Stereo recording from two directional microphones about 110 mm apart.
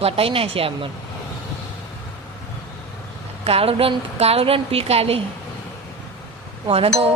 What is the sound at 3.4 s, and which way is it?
Speech, 60° right (ahead or behind).